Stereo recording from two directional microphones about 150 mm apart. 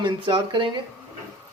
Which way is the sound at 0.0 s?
30° right (ahead or behind).